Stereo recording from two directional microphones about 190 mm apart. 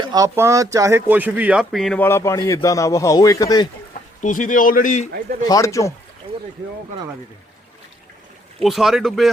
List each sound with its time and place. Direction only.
0.0 s speech: 20° right (ahead or behind); by 3.7 s 20° left (ahead or behind)
4.2 s a man's voice: 45° left (ahead or behind)
5.5 s speech: 15° left (ahead or behind)
8.6 s speech: centre (ahead or behind)